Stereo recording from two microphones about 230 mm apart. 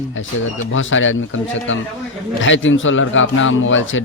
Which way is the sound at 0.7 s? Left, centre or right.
Left.